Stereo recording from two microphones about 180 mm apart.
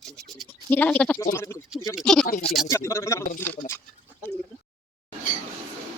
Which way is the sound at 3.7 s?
10° left (ahead or behind).